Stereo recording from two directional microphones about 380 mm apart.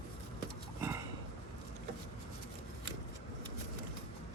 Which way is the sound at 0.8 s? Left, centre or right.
Centre.